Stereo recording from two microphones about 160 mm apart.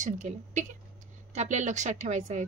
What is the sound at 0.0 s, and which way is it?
A woman's voice, 50° right (ahead or behind).